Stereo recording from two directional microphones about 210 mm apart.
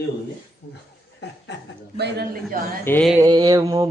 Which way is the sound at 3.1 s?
15° right (ahead or behind).